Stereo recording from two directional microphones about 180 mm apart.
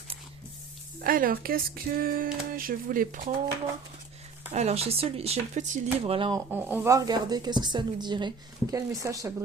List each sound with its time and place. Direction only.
1.0 s speech: 50° right (ahead or behind)
4.5 s speech: 35° right (ahead or behind)
6.5 s a woman's voice: 10° right (ahead or behind)